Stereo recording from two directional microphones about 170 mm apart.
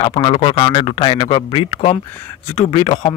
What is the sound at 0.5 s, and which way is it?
Speech, 20° left (ahead or behind).